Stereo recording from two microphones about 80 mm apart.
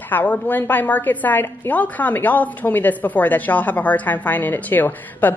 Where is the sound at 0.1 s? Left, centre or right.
Left.